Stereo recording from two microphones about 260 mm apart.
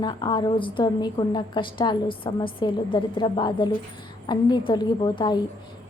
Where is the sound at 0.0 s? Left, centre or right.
Centre.